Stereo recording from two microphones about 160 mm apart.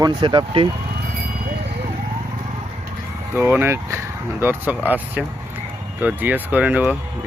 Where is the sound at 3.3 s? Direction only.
15° right (ahead or behind).